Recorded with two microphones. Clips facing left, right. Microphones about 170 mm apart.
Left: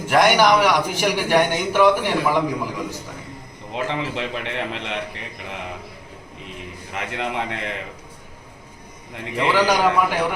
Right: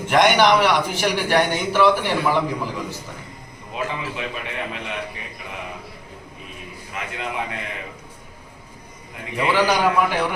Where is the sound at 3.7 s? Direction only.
75° left (ahead or behind).